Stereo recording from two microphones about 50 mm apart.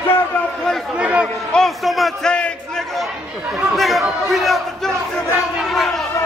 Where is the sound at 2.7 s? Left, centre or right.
Centre.